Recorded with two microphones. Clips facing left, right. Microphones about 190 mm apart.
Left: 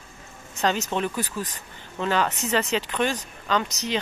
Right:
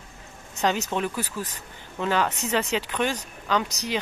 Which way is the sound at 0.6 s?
15° right (ahead or behind).